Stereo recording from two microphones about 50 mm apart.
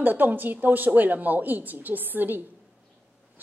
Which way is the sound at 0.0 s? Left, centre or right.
Right.